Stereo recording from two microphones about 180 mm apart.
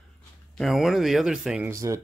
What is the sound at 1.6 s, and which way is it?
Speech, 15° right (ahead or behind).